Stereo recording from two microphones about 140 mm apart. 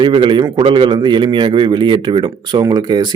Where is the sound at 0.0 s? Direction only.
35° right (ahead or behind).